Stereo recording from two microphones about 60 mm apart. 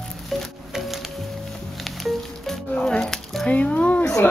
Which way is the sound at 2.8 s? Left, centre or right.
Centre.